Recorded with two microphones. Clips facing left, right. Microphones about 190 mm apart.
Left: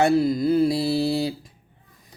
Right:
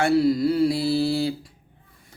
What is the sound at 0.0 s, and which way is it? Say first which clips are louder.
Mantra: even; 20° left (ahead or behind).